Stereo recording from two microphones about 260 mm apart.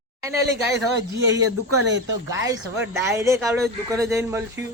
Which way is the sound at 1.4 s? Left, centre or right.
Right.